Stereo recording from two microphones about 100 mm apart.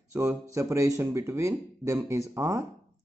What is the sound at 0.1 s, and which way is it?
Speech, 30° right (ahead or behind).